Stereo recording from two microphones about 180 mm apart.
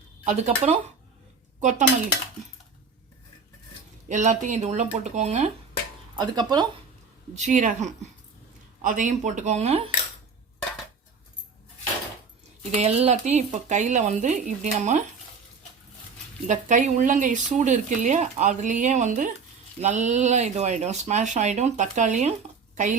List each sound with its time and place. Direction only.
0.3 s speech: 40° right (ahead or behind)
4.1 s speech: 45° right (ahead or behind)
6.1 s speech: 25° right (ahead or behind)
7.3 s speech: 45° right (ahead or behind)
12.7 s speech: 35° right (ahead or behind)
16.5 s speech: 45° right (ahead or behind)